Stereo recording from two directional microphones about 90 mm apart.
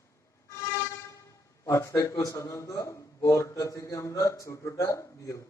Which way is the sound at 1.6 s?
35° left (ahead or behind).